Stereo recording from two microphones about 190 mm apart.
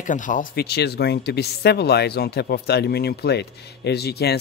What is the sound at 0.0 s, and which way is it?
Speech, 40° left (ahead or behind).